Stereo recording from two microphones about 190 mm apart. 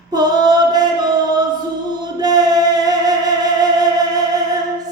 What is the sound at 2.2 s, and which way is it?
Music, 20° right (ahead or behind).